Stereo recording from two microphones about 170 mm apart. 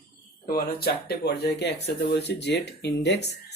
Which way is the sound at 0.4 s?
60° left (ahead or behind).